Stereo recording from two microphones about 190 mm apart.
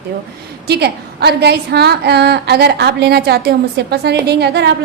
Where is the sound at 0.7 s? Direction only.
60° right (ahead or behind).